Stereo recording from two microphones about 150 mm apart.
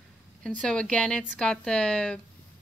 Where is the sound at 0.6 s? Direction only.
5° left (ahead or behind).